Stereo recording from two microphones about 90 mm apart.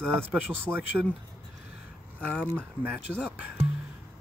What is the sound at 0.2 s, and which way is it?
Speech, 20° right (ahead or behind).